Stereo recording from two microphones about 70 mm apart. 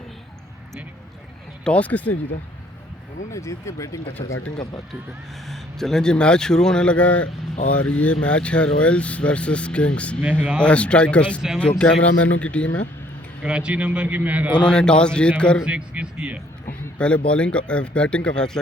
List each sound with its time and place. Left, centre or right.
1.6 s speech: centre
3.3 s speech: left
5.5 s speech: centre
13.4 s a man's voice: centre
14.6 s speech: centre
15.6 s speech: centre
17.0 s speech: centre